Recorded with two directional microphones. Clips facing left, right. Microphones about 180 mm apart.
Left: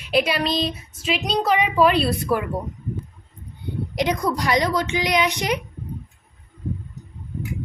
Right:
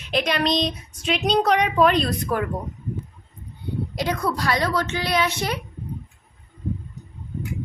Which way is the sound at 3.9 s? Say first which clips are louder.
Left 3 dB; 20° left (ahead or behind).